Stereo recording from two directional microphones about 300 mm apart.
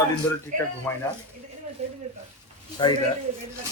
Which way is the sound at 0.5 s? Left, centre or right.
Right.